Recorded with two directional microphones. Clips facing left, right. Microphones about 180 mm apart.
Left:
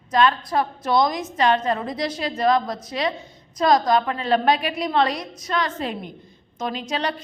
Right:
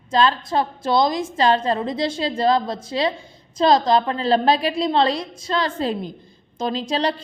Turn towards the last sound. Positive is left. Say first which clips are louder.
# right 4 dB
turn(degrees=-30)  # may be behind; listen again after turning